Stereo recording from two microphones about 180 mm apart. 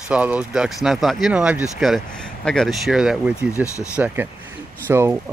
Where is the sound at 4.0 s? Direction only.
5° right (ahead or behind).